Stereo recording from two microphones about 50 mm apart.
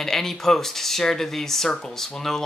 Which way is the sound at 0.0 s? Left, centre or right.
Centre.